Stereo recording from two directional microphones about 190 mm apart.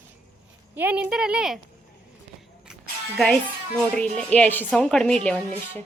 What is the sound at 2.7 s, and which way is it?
A woman's voice, centre (ahead or behind).